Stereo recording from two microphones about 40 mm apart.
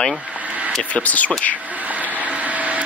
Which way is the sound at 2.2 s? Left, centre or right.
Right.